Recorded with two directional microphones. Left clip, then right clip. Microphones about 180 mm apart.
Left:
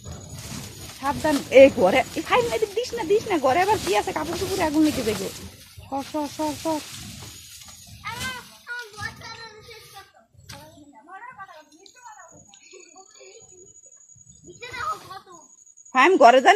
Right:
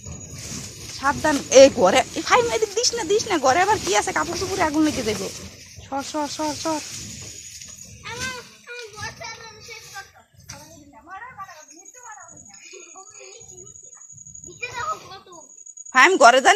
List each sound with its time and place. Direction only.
1.0 s speech: centre (ahead or behind)
15.9 s a woman's voice: 20° left (ahead or behind)